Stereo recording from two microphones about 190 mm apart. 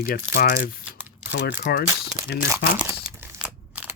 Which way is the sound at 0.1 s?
50° left (ahead or behind).